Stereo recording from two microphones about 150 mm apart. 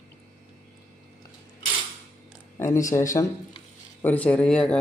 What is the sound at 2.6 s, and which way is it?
Speech, 20° left (ahead or behind).